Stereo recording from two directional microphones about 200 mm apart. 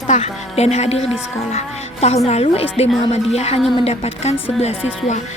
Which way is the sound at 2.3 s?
30° left (ahead or behind).